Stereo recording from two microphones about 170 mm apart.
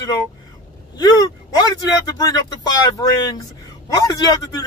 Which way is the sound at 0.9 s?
25° left (ahead or behind).